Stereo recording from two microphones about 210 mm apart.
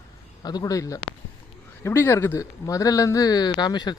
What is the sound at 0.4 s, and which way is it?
Speech, 15° left (ahead or behind).